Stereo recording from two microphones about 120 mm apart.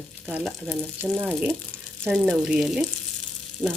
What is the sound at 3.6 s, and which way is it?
Frying, 10° left (ahead or behind).